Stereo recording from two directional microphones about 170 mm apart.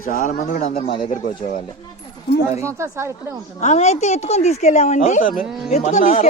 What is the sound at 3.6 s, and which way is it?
A woman's voice, 40° left (ahead or behind).